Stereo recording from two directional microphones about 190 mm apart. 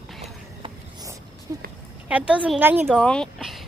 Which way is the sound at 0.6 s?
20° right (ahead or behind).